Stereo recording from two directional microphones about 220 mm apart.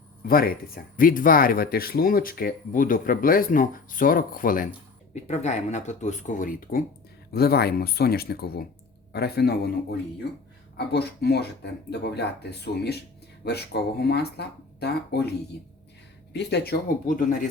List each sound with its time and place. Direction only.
0.3 s speech: 40° left (ahead or behind)
10.8 s speech: 45° left (ahead or behind)
16.3 s speech: 50° left (ahead or behind)